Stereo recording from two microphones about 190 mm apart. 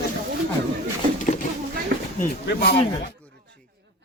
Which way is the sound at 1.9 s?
55° right (ahead or behind).